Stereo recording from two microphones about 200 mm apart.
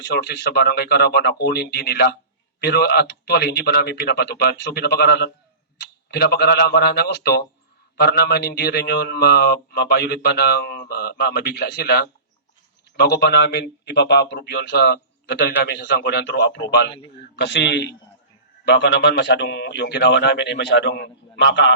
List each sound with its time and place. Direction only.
0.0 s a man's voice: 55° left (ahead or behind)